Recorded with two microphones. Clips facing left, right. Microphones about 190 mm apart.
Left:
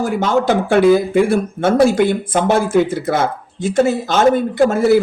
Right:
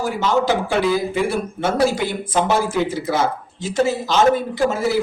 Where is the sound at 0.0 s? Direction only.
50° left (ahead or behind).